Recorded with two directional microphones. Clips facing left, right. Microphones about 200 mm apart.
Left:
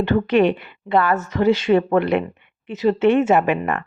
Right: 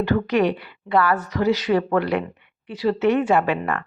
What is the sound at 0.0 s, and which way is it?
A woman's voice, 25° left (ahead or behind).